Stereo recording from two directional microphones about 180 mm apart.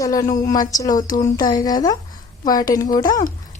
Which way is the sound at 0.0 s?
20° left (ahead or behind).